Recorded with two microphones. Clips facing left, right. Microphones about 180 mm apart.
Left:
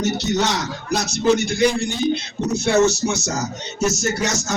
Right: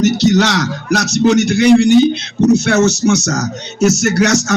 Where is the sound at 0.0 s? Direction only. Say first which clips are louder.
Right 9 dB; 90° right.